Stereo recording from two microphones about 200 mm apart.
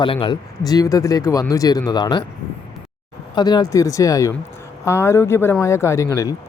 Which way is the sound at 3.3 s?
20° left (ahead or behind).